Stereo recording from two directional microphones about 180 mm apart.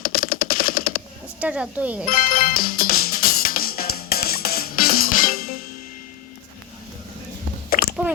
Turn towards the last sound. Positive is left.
turn(degrees=55)  # may be behind; listen again after turning